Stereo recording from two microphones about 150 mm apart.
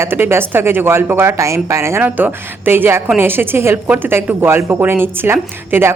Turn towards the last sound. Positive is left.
turn(degrees=-15)  # may be behind; listen again after turning